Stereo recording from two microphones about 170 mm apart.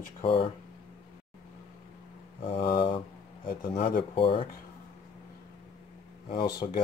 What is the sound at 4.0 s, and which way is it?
Speech, 30° left (ahead or behind).